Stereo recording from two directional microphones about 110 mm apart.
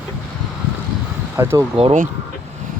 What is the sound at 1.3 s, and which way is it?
Speech, 25° right (ahead or behind).